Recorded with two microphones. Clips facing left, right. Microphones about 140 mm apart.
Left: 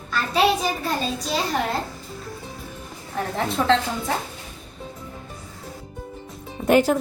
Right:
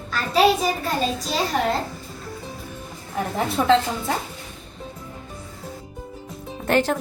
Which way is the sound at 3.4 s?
10° right (ahead or behind).